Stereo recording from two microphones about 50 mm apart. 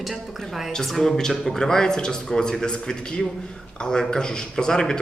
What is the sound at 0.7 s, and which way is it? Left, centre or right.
Speech, centre.